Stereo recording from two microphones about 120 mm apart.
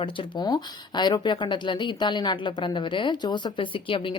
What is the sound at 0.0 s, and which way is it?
A woman's voice, 45° left (ahead or behind).